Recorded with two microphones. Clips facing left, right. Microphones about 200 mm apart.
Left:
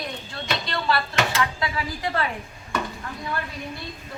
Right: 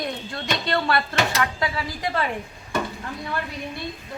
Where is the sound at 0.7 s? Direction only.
55° right (ahead or behind).